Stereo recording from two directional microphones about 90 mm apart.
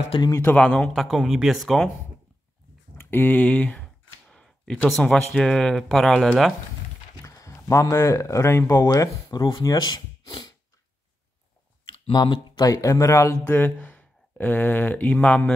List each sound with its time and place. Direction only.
0.4 s a man's voice: 15° left (ahead or behind)
0.9 s speech: centre (ahead or behind)
3.0 s speech: 25° left (ahead or behind); by 6.5 s centre (ahead or behind)
7.2 s speech: 35° left (ahead or behind)
8.9 s speech: 45° left (ahead or behind)
11.9 s a sound: 65° left (ahead or behind)
12.6 s speech: 35° left (ahead or behind)
13.4 s speech: 20° left (ahead or behind)